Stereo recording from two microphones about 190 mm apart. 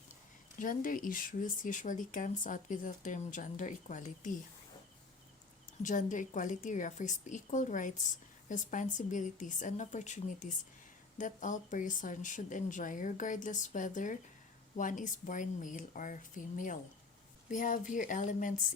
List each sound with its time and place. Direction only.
0.6 s speech: 45° left (ahead or behind)
5.8 s a woman's voice: 40° left (ahead or behind)